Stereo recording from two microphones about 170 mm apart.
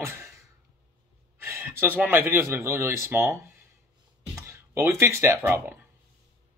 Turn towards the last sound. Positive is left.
turn(degrees=-15)  # may be behind; listen again after turning